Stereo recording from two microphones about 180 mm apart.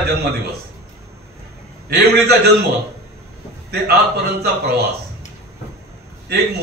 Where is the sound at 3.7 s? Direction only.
60° right (ahead or behind).